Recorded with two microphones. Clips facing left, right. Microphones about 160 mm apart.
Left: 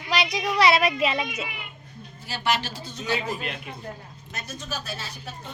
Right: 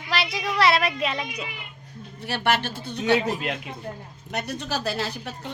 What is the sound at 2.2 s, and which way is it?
A woman's voice, 60° right (ahead or behind).